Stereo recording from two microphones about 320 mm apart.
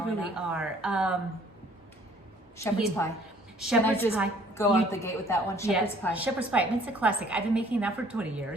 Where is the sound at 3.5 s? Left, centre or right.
Centre.